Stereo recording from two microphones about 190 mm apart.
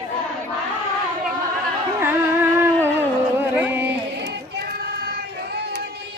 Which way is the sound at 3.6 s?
10° right (ahead or behind).